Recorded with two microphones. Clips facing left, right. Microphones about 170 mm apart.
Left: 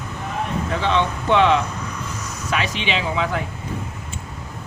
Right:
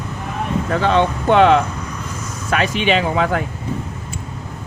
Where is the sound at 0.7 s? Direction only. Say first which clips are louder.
Right 6 dB; 45° right (ahead or behind).